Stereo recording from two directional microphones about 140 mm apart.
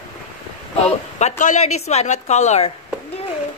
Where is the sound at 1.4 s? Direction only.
55° left (ahead or behind).